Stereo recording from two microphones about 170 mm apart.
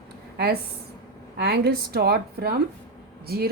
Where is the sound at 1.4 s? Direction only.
70° right (ahead or behind).